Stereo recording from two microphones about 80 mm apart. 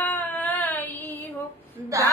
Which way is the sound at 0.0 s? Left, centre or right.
Left.